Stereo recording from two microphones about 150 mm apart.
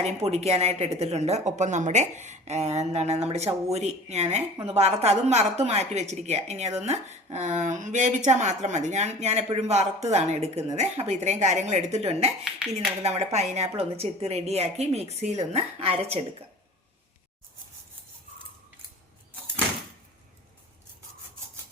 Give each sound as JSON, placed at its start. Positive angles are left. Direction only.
{"t": 0.0, "sound": "speech", "side_deg": -45}